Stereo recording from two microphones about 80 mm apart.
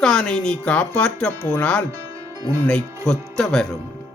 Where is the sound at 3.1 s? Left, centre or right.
Centre.